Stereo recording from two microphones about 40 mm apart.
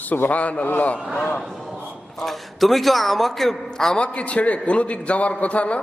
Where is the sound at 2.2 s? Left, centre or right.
Centre.